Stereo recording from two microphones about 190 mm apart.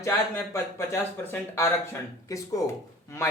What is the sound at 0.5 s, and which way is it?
Speech, 10° left (ahead or behind).